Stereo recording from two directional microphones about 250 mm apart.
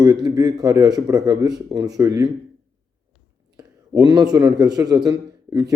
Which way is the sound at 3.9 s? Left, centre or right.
Centre.